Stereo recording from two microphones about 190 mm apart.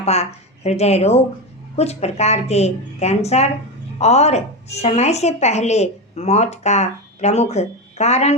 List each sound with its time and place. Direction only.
0.0 s a woman's voice: 35° left (ahead or behind)